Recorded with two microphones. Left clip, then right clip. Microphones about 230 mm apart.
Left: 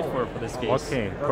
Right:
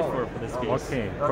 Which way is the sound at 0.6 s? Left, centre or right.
Centre.